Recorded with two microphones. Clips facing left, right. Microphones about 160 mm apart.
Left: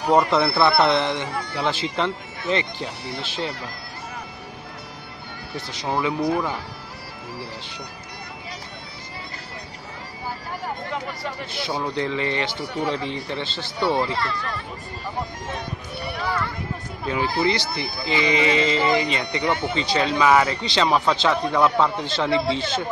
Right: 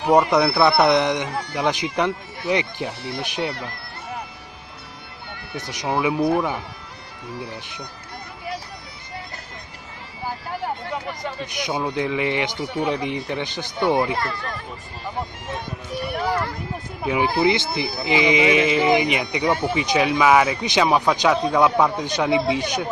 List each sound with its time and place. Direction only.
0.0 s a man's voice: 15° right (ahead or behind)
5.6 s speech: 20° right (ahead or behind)
11.2 s a man's voice: 15° right (ahead or behind)
14.1 s speech: 45° right (ahead or behind)
16.1 s a sound: 45° right (ahead or behind)
17.0 s a man's voice: 15° right (ahead or behind)